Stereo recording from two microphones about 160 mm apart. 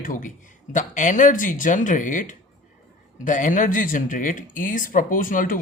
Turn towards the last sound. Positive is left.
turn(degrees=55)  # may be behind; listen again after turning